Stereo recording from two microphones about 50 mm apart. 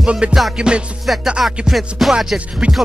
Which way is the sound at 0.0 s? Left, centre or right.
Centre.